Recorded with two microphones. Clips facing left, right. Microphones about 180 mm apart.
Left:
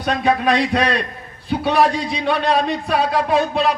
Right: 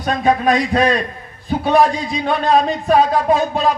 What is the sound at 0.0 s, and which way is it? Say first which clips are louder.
A man's voice: right 2 dB; 40° right (ahead or behind).